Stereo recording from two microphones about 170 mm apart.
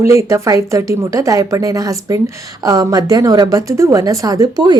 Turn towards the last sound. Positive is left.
turn(degrees=-25)  # may be behind; listen again after turning